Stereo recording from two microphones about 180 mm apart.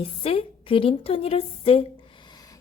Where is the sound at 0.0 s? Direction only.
30° left (ahead or behind).